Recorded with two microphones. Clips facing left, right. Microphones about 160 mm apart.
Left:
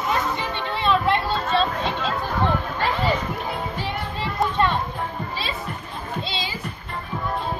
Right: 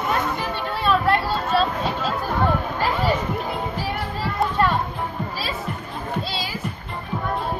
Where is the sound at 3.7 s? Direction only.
5° right (ahead or behind).